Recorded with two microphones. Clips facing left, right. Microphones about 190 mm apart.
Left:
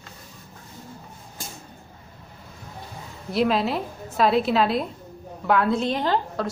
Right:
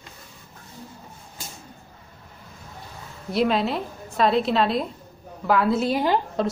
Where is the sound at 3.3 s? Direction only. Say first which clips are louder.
Even; centre (ahead or behind).